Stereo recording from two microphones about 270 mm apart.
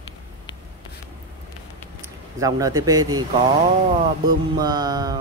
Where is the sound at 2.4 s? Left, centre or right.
Centre.